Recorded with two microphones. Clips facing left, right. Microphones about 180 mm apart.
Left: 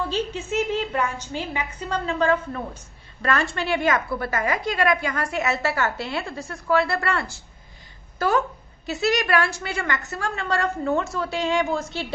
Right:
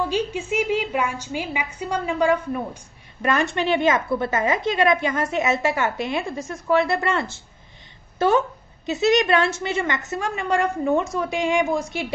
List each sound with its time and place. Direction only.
0.0 s a woman's voice: 10° right (ahead or behind)